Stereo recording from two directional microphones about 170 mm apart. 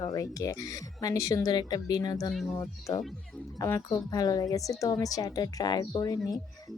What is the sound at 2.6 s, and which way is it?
Speech, 20° left (ahead or behind).